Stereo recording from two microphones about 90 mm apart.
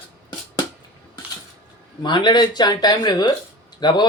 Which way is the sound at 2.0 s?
55° left (ahead or behind).